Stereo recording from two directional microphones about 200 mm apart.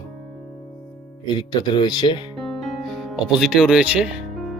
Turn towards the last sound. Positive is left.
turn(degrees=0)  # may be behind; listen again after turning